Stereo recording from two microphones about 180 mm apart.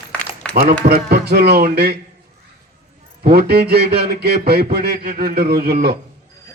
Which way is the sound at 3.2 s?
60° right (ahead or behind).